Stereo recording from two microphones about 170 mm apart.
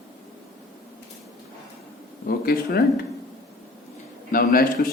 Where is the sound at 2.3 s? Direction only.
65° left (ahead or behind).